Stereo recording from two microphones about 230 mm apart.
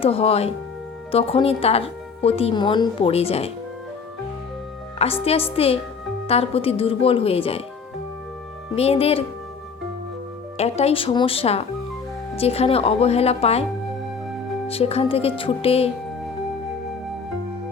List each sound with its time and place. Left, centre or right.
0.0 s speech: left
4.9 s speech: left
8.7 s speech: left
10.6 s speech: left
14.7 s speech: left